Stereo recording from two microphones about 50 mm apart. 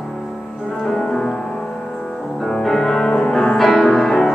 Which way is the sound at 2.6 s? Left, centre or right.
Centre.